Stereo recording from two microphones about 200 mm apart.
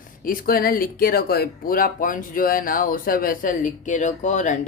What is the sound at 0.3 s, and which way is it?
Speech, 45° left (ahead or behind).